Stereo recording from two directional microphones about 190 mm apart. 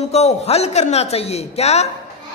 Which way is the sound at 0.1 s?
35° left (ahead or behind).